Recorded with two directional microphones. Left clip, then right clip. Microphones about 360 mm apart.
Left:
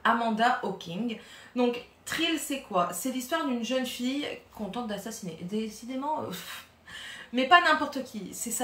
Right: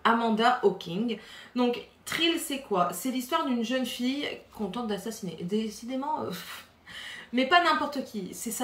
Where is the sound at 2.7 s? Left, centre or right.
Centre.